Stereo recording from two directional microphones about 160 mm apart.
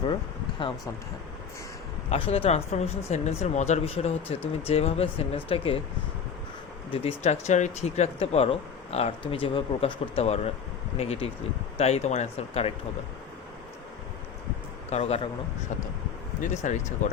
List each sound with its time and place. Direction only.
2.0 s speech: 35° left (ahead or behind)
6.9 s speech: 40° left (ahead or behind)
14.8 s a man's voice: 40° left (ahead or behind)
16.4 s speech: 50° left (ahead or behind)